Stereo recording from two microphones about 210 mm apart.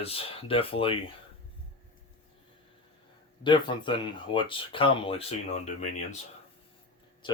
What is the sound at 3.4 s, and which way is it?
Speech, 20° left (ahead or behind).